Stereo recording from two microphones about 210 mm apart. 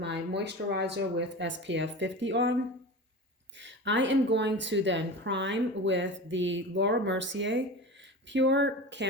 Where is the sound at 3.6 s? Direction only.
60° right (ahead or behind).